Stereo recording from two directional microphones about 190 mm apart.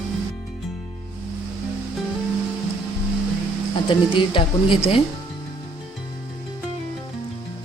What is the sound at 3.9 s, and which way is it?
Speech, 25° left (ahead or behind).